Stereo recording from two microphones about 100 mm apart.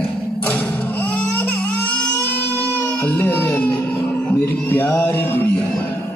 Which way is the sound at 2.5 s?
15° left (ahead or behind).